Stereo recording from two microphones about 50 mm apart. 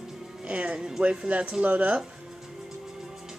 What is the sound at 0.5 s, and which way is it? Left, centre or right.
Speech, right.